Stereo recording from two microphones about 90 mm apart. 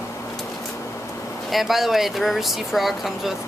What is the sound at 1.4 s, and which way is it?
Speech, centre (ahead or behind).